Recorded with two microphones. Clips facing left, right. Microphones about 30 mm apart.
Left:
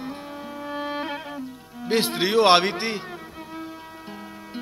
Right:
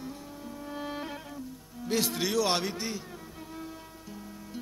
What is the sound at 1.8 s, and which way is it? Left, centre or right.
Speech, left.